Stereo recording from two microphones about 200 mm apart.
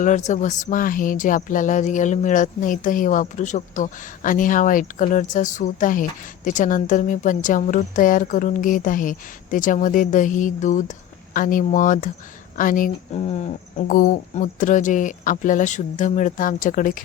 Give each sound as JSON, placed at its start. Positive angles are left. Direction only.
{"t": 0.0, "sound": "speech", "side_deg": 35}